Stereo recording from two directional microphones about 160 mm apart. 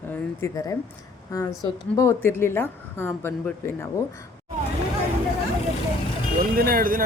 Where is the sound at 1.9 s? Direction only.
15° left (ahead or behind).